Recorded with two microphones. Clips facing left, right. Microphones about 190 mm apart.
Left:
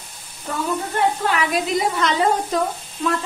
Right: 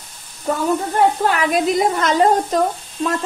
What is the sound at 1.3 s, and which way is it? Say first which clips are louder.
A woman's voice: right 4 dB; 50° right (ahead or behind).